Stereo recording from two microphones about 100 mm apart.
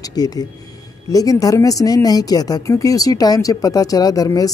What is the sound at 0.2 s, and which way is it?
A woman's voice, 40° left (ahead or behind).